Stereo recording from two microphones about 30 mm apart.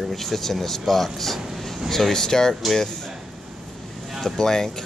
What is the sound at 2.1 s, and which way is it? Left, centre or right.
Speech, centre.